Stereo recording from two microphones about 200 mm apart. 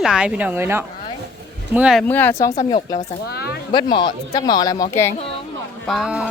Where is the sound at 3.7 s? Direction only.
25° left (ahead or behind).